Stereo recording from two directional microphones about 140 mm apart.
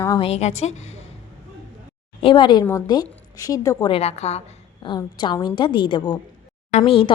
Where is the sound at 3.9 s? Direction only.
50° left (ahead or behind).